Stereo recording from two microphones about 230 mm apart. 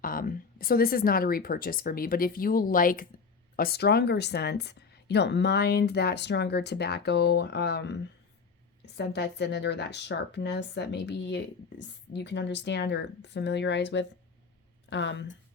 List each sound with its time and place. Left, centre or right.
0.0 s a woman's voice: left